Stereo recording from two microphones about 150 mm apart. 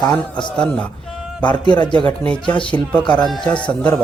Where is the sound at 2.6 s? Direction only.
5° left (ahead or behind).